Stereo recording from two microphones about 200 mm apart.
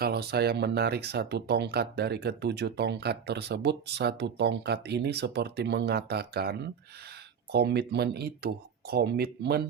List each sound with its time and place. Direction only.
0.0 s speech: 50° right (ahead or behind)